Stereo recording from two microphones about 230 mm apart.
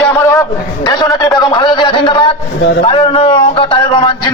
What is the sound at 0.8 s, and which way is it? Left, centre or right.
A man's voice, centre.